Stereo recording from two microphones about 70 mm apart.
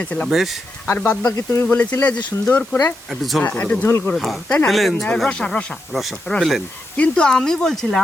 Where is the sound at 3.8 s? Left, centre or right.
Left.